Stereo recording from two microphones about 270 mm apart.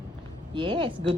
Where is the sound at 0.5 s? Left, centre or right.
Centre.